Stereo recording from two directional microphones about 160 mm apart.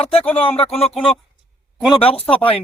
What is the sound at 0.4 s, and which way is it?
Speech, 35° left (ahead or behind).